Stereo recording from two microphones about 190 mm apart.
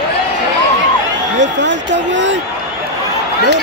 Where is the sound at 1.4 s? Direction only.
70° right (ahead or behind).